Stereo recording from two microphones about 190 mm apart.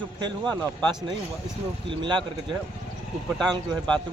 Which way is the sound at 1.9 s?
25° right (ahead or behind).